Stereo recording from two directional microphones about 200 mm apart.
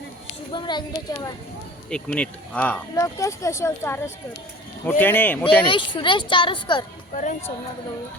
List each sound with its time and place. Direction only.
0.5 s speech: 25° left (ahead or behind)
1.9 s speech: 5° left (ahead or behind)
2.9 s speech: 15° left (ahead or behind)
5.6 s speech: 25° left (ahead or behind)